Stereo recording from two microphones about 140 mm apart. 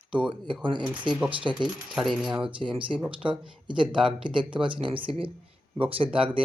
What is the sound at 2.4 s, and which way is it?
Speech, 40° right (ahead or behind).